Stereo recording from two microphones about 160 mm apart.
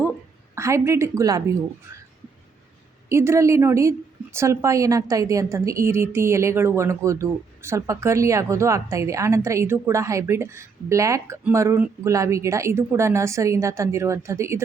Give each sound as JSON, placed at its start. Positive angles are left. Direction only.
{"t": 0.5, "sound": "a woman's voice", "side_deg": -20}
{"t": 1.9, "sound": "a sound", "side_deg": -20}
{"t": 3.1, "sound": "a woman's voice", "side_deg": -15}